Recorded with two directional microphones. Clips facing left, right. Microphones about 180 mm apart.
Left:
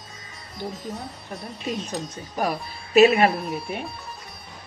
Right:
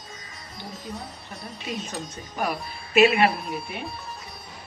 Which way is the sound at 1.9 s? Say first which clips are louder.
Left 3 dB; 40° left (ahead or behind).